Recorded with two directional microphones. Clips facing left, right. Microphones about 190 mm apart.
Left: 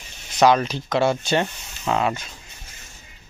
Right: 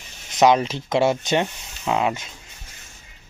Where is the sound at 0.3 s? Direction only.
20° right (ahead or behind).